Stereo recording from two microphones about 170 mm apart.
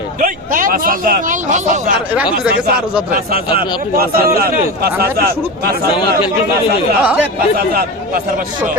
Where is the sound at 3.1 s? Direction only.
60° right (ahead or behind).